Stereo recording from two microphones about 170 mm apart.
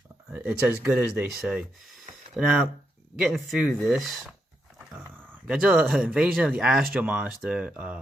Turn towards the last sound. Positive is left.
turn(degrees=-5)  # may be behind; listen again after turning